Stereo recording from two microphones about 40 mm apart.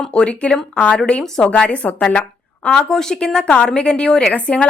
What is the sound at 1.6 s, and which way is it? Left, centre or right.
Speech, left.